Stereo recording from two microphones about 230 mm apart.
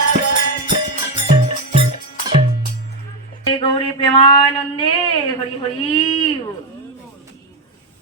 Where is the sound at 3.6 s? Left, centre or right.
Left.